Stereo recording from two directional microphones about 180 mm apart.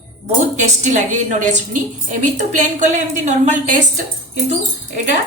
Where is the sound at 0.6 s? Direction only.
40° right (ahead or behind).